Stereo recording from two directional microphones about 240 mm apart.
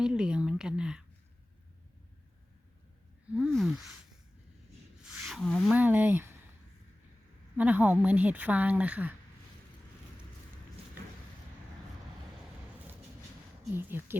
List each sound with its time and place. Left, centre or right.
0.0 s speech: centre
3.3 s speech: centre
5.1 s speech: centre
7.5 s speech: centre
13.7 s speech: centre